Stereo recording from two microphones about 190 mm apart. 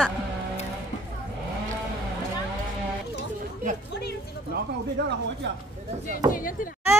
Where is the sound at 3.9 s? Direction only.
60° left (ahead or behind).